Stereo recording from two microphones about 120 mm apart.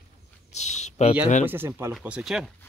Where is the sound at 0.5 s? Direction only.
70° left (ahead or behind).